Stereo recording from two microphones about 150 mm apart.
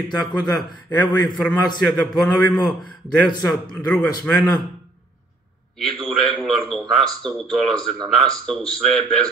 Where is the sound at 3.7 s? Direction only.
10° left (ahead or behind).